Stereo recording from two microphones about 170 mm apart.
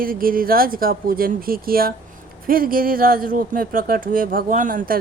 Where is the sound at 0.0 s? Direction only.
60° right (ahead or behind).